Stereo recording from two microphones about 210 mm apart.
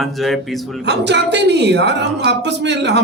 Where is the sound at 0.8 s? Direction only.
55° right (ahead or behind).